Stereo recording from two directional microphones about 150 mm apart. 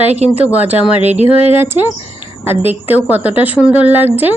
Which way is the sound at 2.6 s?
10° right (ahead or behind).